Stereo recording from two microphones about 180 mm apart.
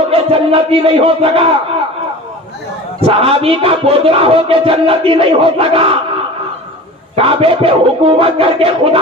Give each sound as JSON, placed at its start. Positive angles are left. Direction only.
{"t": 0.1, "sound": "crowd", "side_deg": -30}
{"t": 3.0, "sound": "music", "side_deg": -30}
{"t": 7.2, "sound": "music", "side_deg": -30}